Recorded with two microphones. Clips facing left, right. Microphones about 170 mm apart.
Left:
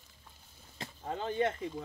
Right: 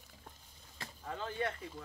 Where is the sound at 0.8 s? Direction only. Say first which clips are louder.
Left 5 dB; 25° left (ahead or behind).